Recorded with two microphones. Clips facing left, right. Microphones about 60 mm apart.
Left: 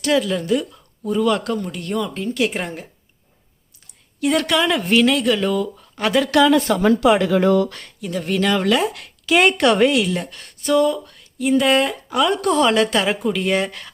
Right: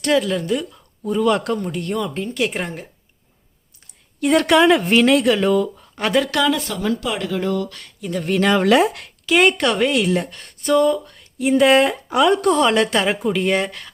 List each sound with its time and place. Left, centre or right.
0.1 s a woman's voice: centre
4.2 s a woman's voice: centre
6.7 s speech: left
8.0 s a woman's voice: centre
8.4 s a woman's voice: centre
9.3 s speech: centre
10.2 s a woman's voice: centre